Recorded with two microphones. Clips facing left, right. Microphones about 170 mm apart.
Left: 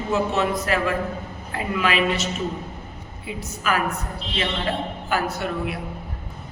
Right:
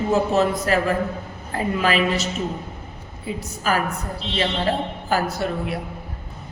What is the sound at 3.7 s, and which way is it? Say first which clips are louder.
Speech: right 2 dB; 35° right (ahead or behind).